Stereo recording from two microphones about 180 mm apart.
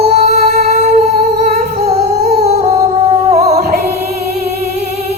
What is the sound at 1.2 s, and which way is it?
Humming, 40° right (ahead or behind).